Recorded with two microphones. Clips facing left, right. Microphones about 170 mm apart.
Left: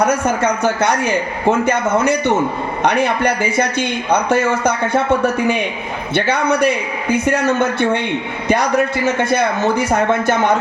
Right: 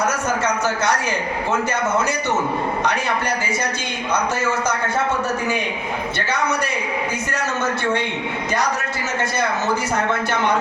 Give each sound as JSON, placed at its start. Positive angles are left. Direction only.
{"t": 0.0, "sound": "a man's voice", "side_deg": 55}
{"t": 6.1, "sound": "a man's voice", "side_deg": 60}
{"t": 9.3, "sound": "a man's voice", "side_deg": 55}